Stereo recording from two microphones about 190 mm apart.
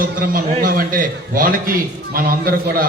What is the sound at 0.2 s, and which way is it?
A man's voice, 50° right (ahead or behind).